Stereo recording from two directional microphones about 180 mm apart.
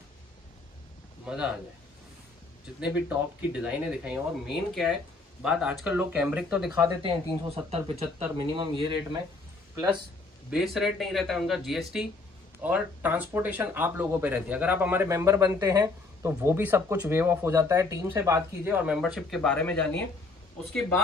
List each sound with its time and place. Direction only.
1.2 s speech: 5° right (ahead or behind)
2.6 s speech: 5° right (ahead or behind)
7.0 s speech: 30° right (ahead or behind)
10.5 s speech: centre (ahead or behind)